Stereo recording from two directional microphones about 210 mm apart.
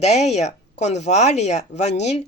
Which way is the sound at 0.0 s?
30° left (ahead or behind).